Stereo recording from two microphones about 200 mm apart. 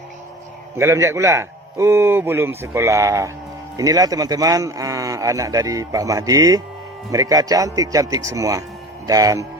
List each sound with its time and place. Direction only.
0.8 s speech: 15° right (ahead or behind)